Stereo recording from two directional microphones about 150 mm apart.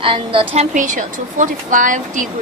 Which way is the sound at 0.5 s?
50° right (ahead or behind).